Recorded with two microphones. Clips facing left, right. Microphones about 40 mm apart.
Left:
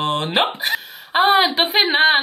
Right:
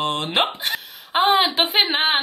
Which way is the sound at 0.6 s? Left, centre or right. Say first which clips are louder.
Left 4 dB; centre.